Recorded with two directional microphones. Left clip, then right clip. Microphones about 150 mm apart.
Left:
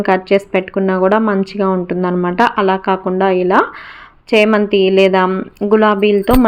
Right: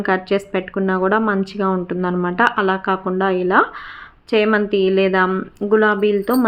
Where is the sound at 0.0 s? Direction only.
20° left (ahead or behind).